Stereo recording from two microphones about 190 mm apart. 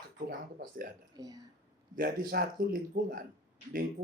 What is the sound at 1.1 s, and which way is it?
Speech, 20° right (ahead or behind).